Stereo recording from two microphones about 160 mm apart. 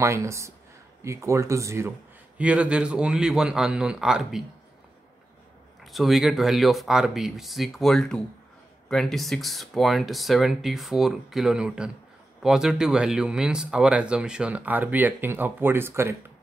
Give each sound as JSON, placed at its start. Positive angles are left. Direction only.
{"t": 0.0, "sound": "a man's voice", "side_deg": -20}
{"t": 5.9, "sound": "speech", "side_deg": 0}